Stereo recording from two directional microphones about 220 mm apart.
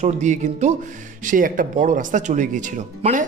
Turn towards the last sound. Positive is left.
turn(degrees=-35)  # may be behind; listen again after turning